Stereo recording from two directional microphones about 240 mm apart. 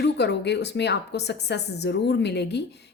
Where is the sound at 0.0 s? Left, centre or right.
Left.